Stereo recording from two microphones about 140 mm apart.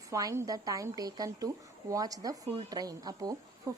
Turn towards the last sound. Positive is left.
turn(degrees=-25)  # may be behind; listen again after turning